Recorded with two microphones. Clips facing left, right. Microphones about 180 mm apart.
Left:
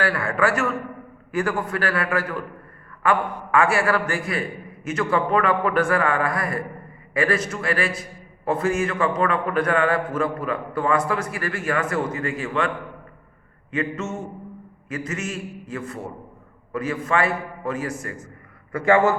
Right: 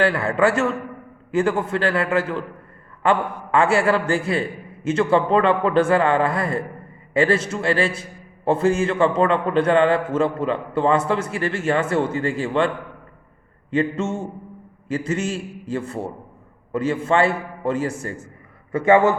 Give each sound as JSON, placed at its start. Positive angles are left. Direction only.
{"t": 0.0, "sound": "a man's voice", "side_deg": -25}